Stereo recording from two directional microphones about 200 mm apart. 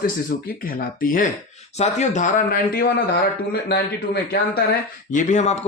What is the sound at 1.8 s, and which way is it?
A man's voice, 35° left (ahead or behind).